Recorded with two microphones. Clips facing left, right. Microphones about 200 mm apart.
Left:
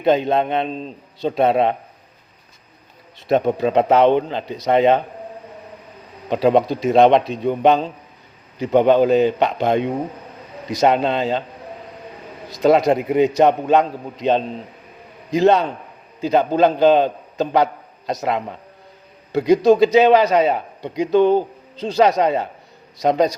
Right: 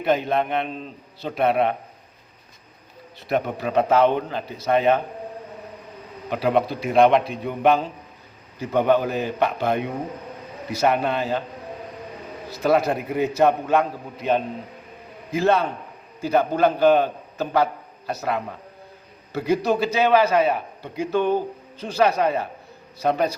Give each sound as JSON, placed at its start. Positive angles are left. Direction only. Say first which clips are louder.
{"t": 0.0, "sound": "a man's voice", "louder": "left 5 dB", "side_deg": 20}
{"t": 3.2, "sound": "a man's voice", "louder": "left 7 dB", "side_deg": 25}
{"t": 6.3, "sound": "a man's voice", "louder": "left 5 dB", "side_deg": 25}
{"t": 12.6, "sound": "a man's voice", "louder": "left 5 dB", "side_deg": 20}